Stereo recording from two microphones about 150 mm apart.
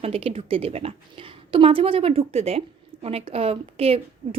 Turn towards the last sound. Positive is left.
turn(degrees=-40)  # may be behind; listen again after turning